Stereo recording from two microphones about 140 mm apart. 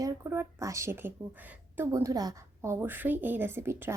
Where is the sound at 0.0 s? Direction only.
20° right (ahead or behind).